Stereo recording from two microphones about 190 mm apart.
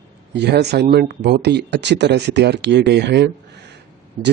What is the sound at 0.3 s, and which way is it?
Speech, 60° right (ahead or behind).